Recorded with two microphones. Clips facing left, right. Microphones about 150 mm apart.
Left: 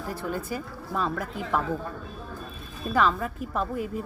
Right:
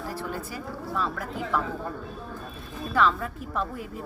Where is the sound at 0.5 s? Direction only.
20° left (ahead or behind).